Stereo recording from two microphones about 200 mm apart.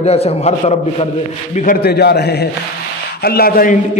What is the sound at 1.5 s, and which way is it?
A man's voice, 45° left (ahead or behind).